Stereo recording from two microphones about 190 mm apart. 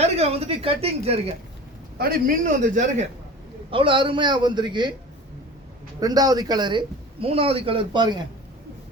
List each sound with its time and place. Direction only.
0.0 s speech: 30° right (ahead or behind)
2.0 s a man's voice: 50° right (ahead or behind)
3.7 s a man's voice: 25° right (ahead or behind)
6.0 s a man's voice: 20° right (ahead or behind)